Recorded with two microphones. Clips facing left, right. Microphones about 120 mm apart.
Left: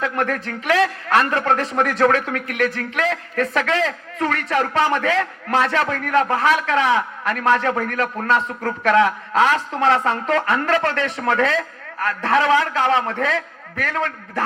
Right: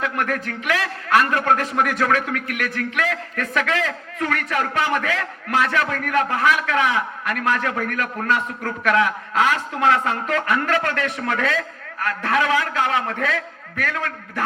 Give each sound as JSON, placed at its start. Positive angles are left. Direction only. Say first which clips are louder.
{"t": 0.2, "sound": "a man's voice", "louder": "left 2 dB", "side_deg": 30}